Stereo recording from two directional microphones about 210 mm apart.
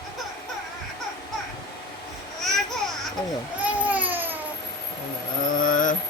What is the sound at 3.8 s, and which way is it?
Baby cry, 5° right (ahead or behind).